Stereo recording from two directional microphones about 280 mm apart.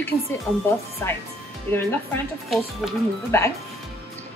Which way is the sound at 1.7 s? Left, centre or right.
Centre.